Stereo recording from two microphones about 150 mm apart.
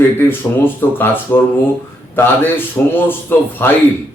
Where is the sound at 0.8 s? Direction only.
15° left (ahead or behind).